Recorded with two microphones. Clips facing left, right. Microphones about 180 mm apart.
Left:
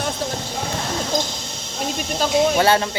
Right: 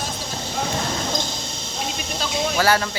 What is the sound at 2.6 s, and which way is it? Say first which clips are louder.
Speech: right 2 dB; 25° left (ahead or behind).